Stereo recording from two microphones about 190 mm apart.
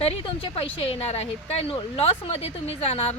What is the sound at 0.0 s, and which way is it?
Speech, 30° left (ahead or behind).